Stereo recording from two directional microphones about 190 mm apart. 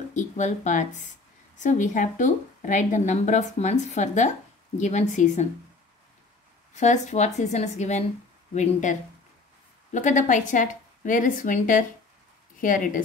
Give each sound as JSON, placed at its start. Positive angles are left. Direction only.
{"t": 0.1, "sound": "a woman's voice", "side_deg": 40}
{"t": 6.7, "sound": "a woman's voice", "side_deg": 35}
{"t": 9.9, "sound": "a woman's voice", "side_deg": 40}